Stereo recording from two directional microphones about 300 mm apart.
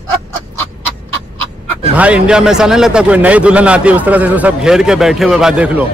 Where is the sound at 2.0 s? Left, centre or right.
Centre.